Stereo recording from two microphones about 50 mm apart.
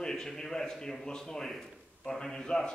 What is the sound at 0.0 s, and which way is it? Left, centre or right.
A man's voice, centre.